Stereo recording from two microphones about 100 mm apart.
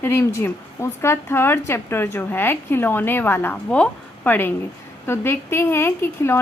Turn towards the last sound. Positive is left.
turn(degrees=25)  # may be behind; listen again after turning